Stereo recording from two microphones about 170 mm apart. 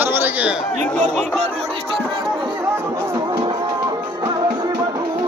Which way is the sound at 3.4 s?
25° right (ahead or behind).